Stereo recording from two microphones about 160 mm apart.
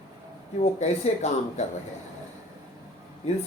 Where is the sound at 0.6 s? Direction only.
45° left (ahead or behind).